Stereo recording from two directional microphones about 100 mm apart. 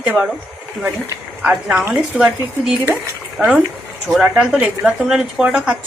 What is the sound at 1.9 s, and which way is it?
A woman's voice, 10° right (ahead or behind).